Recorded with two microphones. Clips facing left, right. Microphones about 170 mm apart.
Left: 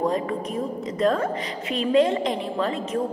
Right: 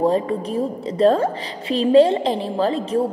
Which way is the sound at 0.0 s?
30° right (ahead or behind).